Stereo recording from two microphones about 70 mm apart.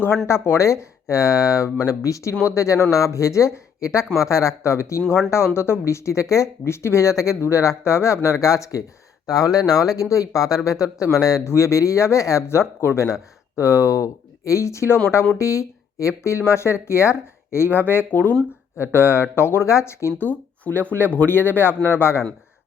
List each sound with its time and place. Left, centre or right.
0.3 s speech: left
11.4 s a man's voice: left
18.9 s speech: left
20.7 s a man's voice: left